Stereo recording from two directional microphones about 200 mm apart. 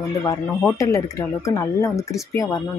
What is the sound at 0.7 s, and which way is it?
Speech, 15° left (ahead or behind).